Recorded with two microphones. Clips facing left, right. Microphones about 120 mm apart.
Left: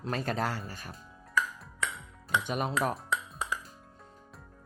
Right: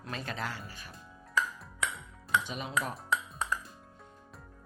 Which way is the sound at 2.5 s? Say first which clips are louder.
Left 5 dB; 50° left (ahead or behind).